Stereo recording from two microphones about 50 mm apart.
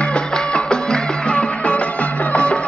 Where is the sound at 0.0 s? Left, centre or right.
Left.